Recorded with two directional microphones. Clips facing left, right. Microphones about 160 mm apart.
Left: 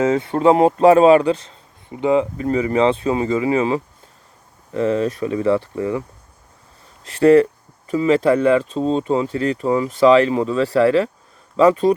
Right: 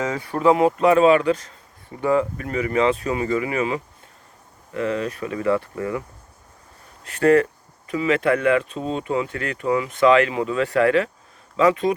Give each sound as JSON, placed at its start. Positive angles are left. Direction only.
{"t": 0.0, "sound": "speech", "side_deg": 25}
{"t": 7.0, "sound": "speech", "side_deg": 30}